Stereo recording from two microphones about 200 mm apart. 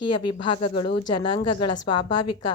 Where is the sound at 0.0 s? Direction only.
25° left (ahead or behind).